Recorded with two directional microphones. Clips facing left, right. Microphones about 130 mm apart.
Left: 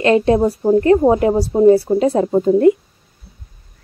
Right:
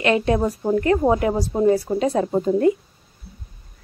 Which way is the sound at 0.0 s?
30° left (ahead or behind).